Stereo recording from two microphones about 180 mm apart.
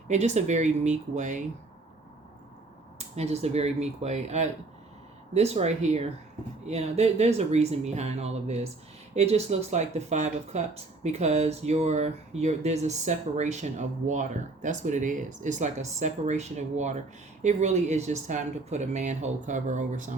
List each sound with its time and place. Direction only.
0.1 s speech: 40° right (ahead or behind)
3.2 s speech: 35° right (ahead or behind)